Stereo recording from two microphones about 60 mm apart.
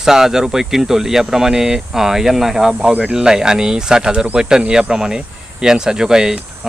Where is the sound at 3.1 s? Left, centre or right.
Centre.